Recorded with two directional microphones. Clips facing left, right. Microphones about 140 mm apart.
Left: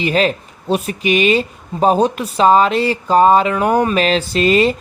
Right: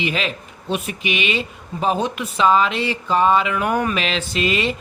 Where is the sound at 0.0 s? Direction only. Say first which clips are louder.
Left 8 dB; 40° left (ahead or behind).